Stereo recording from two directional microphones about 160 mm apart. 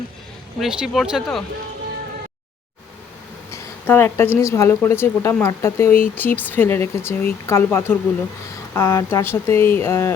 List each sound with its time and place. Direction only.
0.6 s speech: 5° right (ahead or behind)
3.5 s a sound: 15° left (ahead or behind)
4.4 s speech: 20° left (ahead or behind)